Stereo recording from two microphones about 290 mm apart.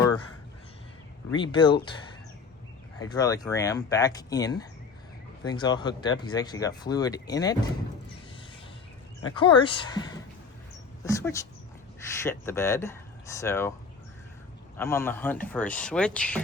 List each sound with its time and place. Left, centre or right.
1.3 s speech: centre
3.0 s speech: centre
9.3 s speech: centre
11.0 s speech: centre
14.8 s a man's voice: centre